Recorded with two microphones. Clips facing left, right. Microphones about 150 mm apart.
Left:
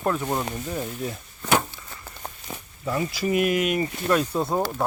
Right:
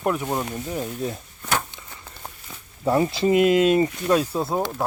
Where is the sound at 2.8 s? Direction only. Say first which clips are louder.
Right 6 dB; 30° right (ahead or behind).